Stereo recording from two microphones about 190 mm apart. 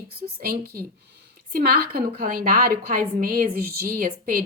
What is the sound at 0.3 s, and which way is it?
Speech, 50° right (ahead or behind).